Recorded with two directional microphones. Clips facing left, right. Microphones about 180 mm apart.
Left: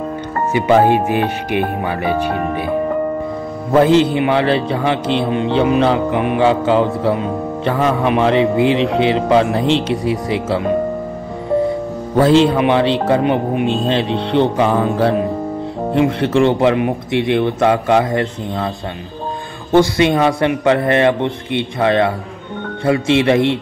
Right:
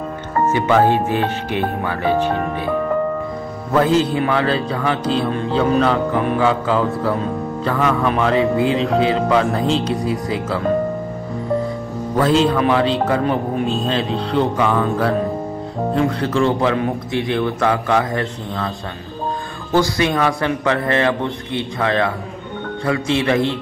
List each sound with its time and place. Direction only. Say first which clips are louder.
0.5 s speech: left 3 dB; 15° left (ahead or behind)
3.7 s a man's voice: left 4 dB; 25° left (ahead or behind)
5.3 s speech: left 5 dB; 15° left (ahead or behind)
6.2 s a man's voice: left 3 dB; 25° left (ahead or behind)
12.2 s a man's voice: left 4 dB; 25° left (ahead or behind)
15.9 s a man's voice: left 4 dB; 25° left (ahead or behind)
19.7 s a man's voice: left 5 dB; 25° left (ahead or behind)